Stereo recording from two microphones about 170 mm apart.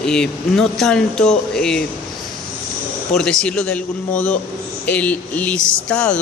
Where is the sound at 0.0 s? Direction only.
5° left (ahead or behind).